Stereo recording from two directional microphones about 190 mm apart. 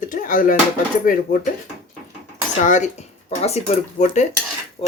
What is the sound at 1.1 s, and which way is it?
Cutlery, 50° left (ahead or behind).